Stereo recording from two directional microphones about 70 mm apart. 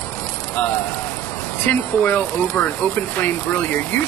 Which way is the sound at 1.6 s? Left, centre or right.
Left.